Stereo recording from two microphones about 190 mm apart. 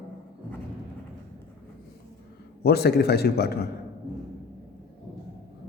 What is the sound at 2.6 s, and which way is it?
A man's voice, 55° left (ahead or behind).